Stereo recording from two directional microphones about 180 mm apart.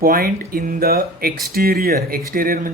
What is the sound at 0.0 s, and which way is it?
Speech, 55° right (ahead or behind).